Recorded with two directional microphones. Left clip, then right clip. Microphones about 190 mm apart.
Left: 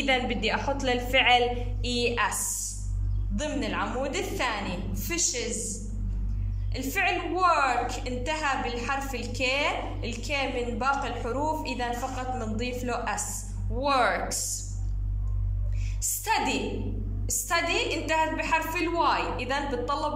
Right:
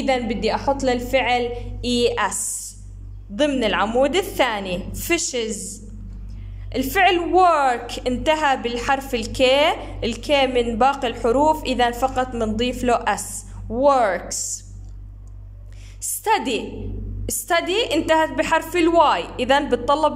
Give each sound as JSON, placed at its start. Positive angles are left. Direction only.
{"t": 0.0, "sound": "a woman's voice", "side_deg": -25}
{"t": 16.0, "sound": "a woman's voice", "side_deg": -40}